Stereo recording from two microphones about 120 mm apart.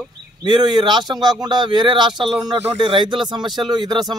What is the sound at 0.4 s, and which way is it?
A man's voice, 40° right (ahead or behind).